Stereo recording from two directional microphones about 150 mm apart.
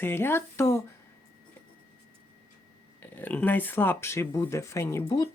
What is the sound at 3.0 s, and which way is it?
Speech, 10° left (ahead or behind).